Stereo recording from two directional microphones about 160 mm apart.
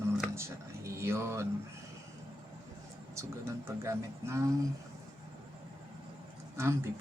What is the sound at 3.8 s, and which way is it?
Speech, 15° right (ahead or behind).